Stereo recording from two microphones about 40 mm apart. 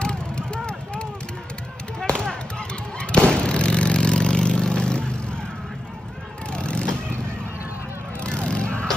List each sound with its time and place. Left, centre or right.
0.0 s vehicle: left
2.0 s a sound: left
3.0 s vehicle: left
6.5 s vehicle: left
8.2 s vehicle: left